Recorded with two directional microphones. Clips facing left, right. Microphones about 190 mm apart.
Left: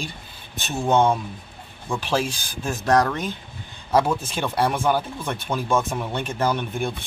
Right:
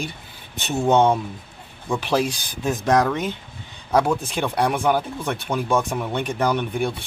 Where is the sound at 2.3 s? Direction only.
20° right (ahead or behind).